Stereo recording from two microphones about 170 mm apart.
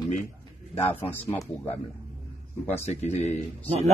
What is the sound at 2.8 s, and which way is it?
Speech, 40° left (ahead or behind).